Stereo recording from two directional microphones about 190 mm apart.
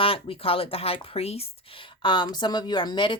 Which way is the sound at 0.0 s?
30° left (ahead or behind).